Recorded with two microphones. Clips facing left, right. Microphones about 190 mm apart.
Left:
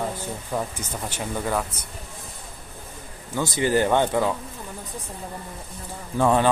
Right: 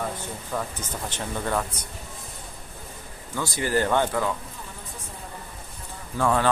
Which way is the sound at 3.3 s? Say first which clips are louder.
Left 4 dB; 20° left (ahead or behind).